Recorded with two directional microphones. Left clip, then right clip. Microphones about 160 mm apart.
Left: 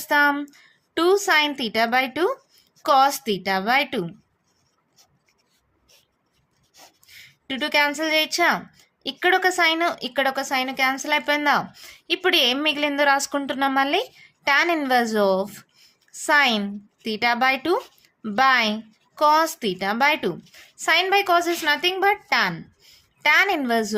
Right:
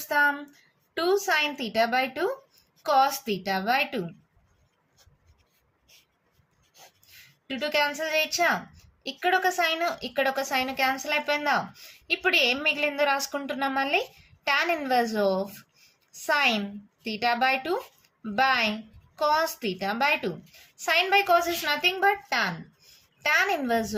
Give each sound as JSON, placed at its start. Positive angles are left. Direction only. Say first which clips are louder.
{"t": 0.0, "sound": "a woman's voice", "louder": "left 5 dB", "side_deg": 55}
{"t": 7.0, "sound": "a woman's voice", "louder": "left 6 dB", "side_deg": 55}